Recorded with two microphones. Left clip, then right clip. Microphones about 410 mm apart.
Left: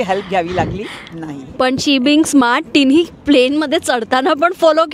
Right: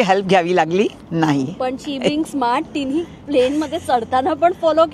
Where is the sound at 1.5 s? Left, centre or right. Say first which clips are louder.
Left 9 dB; left.